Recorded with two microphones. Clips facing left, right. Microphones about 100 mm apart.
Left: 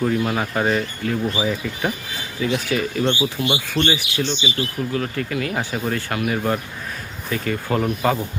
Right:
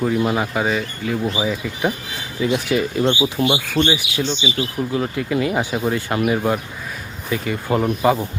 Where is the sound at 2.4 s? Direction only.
15° right (ahead or behind).